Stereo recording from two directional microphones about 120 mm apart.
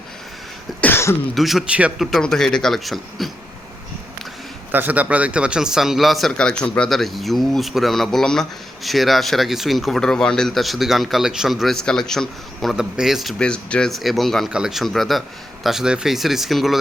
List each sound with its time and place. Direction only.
0.8 s cough: 20° left (ahead or behind)
1.4 s speech: centre (ahead or behind)
2.0 s speech: 5° left (ahead or behind)
4.7 s speech: 15° right (ahead or behind)